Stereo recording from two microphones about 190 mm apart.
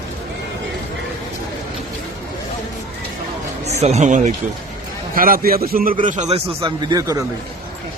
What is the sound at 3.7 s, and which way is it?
A man's voice, 35° right (ahead or behind).